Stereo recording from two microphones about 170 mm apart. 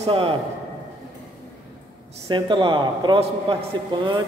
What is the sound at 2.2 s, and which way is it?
A man's voice, 30° right (ahead or behind).